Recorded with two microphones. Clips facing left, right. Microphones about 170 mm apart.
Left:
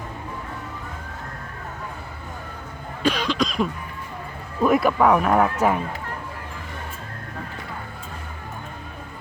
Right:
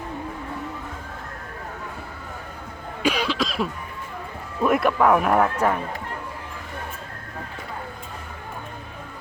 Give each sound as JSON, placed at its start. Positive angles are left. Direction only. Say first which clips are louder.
{"t": 3.0, "sound": "cough", "louder": "left 1 dB", "side_deg": -10}
{"t": 4.6, "sound": "speech", "louder": "left 1 dB", "side_deg": 0}